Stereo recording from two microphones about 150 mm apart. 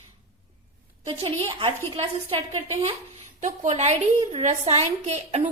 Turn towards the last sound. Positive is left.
turn(degrees=-45)  # may be behind; listen again after turning